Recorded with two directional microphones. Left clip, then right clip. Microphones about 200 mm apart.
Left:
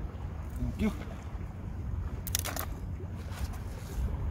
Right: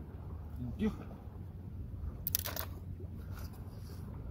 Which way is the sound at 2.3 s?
35° right (ahead or behind).